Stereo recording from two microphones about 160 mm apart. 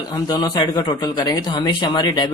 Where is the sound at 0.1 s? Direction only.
25° left (ahead or behind).